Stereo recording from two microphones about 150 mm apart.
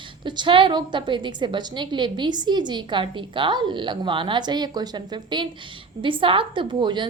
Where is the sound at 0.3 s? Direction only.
30° right (ahead or behind).